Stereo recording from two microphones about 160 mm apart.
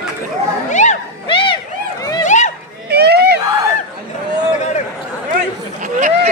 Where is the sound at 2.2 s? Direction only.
50° left (ahead or behind).